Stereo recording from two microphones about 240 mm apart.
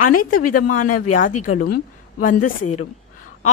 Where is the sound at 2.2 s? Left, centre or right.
Left.